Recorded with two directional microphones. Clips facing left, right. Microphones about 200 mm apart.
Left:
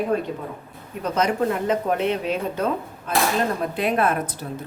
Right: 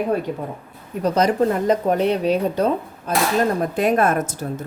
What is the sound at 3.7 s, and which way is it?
Speech, 45° right (ahead or behind).